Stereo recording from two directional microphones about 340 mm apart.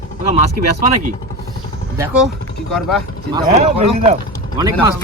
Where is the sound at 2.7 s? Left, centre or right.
Centre.